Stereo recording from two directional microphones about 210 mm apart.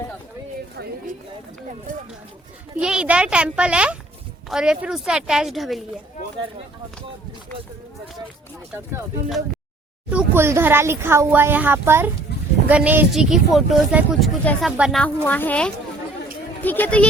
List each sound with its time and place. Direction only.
0.8 s a sound: 50° right (ahead or behind)
2.7 s speech: 5° right (ahead or behind)
10.1 s a woman's voice: 10° right (ahead or behind); by 17.1 s 5° left (ahead or behind)